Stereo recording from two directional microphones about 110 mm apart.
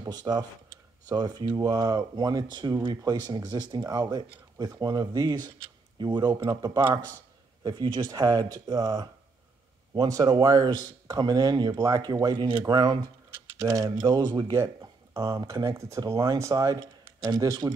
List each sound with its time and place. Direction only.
0.0 s speech: 40° right (ahead or behind)